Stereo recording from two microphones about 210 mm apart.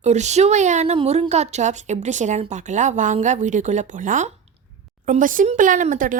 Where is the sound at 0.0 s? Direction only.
35° right (ahead or behind).